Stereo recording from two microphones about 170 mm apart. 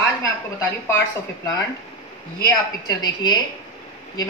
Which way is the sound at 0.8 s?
15° left (ahead or behind).